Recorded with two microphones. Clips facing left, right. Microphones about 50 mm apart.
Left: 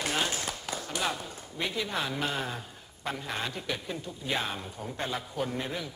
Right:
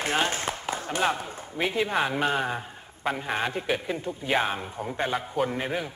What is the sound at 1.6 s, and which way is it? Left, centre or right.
Speech, right.